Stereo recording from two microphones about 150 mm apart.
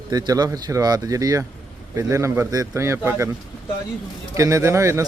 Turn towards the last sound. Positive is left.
turn(degrees=-20)  # may be behind; listen again after turning